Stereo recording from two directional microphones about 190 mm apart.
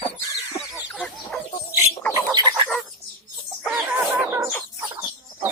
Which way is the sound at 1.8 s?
15° left (ahead or behind).